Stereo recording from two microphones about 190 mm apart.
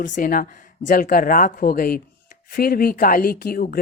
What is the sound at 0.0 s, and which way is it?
Speech, 45° left (ahead or behind).